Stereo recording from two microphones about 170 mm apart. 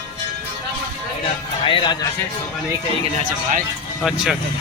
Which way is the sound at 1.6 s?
30° left (ahead or behind).